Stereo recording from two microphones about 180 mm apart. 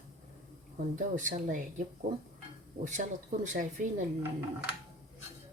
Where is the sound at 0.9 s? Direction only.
45° right (ahead or behind).